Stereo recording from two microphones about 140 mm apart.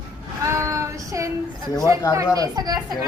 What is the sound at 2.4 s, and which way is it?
Speech, 30° right (ahead or behind).